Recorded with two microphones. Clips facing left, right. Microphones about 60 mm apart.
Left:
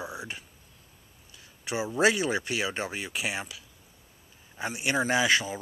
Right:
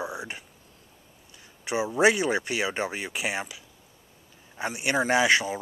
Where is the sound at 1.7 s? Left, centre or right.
Centre.